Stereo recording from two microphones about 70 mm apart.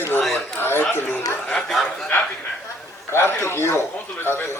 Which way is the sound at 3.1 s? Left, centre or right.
Left.